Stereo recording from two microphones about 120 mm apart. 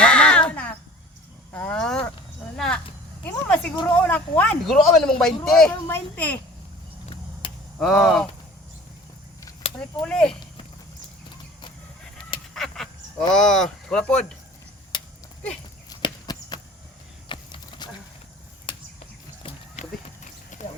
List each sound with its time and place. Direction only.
0.0 s a sound: 10° left (ahead or behind)
4.0 s speech: 10° left (ahead or behind)
4.6 s speech: centre (ahead or behind)
7.4 s a sound: 45° left (ahead or behind)
7.8 s speech: 5° left (ahead or behind)
10.1 s speech: 5° left (ahead or behind)
12.5 s duck: 5° left (ahead or behind)
13.3 s speech: 5° left (ahead or behind)
15.9 s horse: 35° left (ahead or behind)
18.7 s a sound: 45° left (ahead or behind)
19.8 s horse: 70° left (ahead or behind)
20.5 s horse: 90° left